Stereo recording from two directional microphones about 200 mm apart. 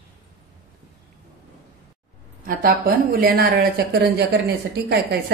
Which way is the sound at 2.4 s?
45° right (ahead or behind).